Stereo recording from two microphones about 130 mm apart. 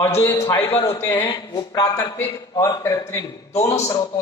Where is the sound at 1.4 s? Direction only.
35° left (ahead or behind).